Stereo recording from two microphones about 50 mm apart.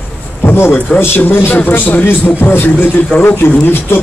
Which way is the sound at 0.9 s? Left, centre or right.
Left.